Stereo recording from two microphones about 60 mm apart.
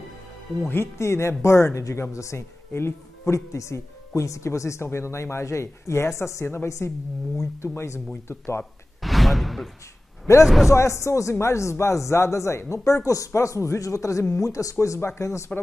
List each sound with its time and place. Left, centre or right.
0.9 s speech: left
2.7 s speech: left
3.3 s speech: left
9.0 s a sound: centre
10.4 s speech: centre
10.7 s speech: left